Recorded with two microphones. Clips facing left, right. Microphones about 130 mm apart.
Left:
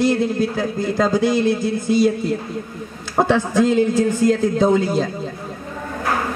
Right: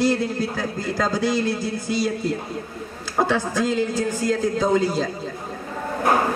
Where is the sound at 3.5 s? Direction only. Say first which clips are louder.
Left 6 dB; 25° left (ahead or behind).